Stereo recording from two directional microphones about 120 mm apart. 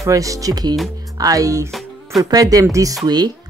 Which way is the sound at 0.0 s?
25° right (ahead or behind).